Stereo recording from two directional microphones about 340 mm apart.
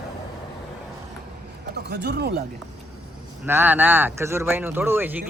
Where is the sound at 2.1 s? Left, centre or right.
Right.